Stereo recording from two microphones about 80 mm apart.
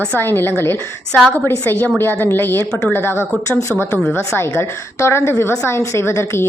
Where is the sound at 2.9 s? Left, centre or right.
Left.